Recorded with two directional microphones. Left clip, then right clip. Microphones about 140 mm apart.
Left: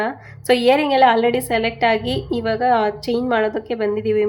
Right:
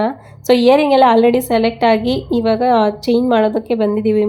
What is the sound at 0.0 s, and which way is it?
A woman's voice, 30° right (ahead or behind).